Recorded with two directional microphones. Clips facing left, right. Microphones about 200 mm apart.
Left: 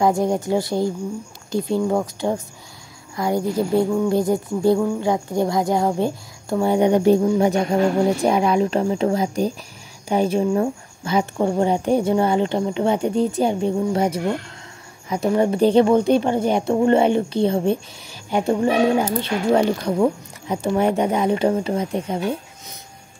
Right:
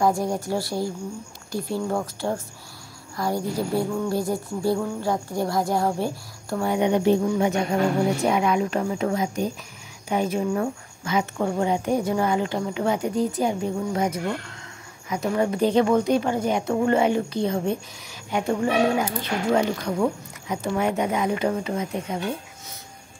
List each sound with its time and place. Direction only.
0.0 s speech: 20° left (ahead or behind)
6.8 s speech: 40° left (ahead or behind)